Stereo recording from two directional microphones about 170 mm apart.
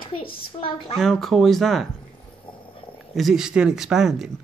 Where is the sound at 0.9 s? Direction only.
Centre (ahead or behind).